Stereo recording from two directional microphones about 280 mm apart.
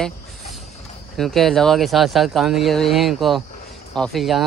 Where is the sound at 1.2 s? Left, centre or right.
Centre.